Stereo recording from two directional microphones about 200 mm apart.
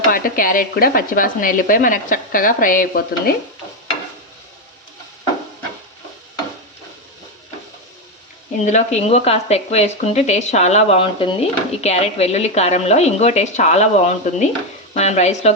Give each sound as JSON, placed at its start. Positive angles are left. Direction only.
{"t": 0.1, "sound": "a woman's voice", "side_deg": 45}
{"t": 8.6, "sound": "speech", "side_deg": 35}